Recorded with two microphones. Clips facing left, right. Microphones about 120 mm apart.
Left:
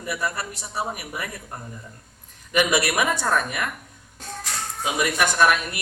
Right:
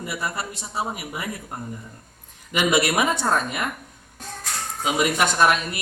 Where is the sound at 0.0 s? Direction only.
20° right (ahead or behind).